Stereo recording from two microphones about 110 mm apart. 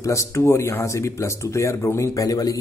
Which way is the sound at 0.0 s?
25° left (ahead or behind).